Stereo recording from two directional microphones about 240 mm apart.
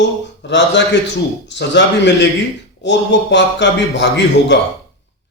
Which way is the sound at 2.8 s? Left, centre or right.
Left.